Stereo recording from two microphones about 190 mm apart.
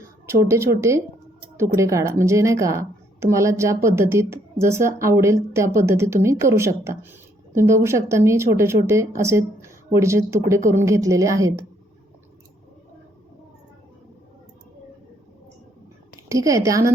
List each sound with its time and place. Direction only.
0.3 s a woman's voice: 15° right (ahead or behind)
16.3 s a woman's voice: 15° right (ahead or behind)